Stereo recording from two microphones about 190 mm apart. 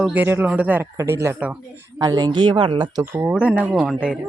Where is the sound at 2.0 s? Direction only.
20° right (ahead or behind).